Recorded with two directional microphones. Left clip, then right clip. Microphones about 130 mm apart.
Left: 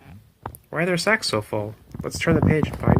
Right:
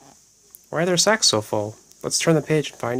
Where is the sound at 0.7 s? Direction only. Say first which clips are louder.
Right 2 dB; 50° right (ahead or behind).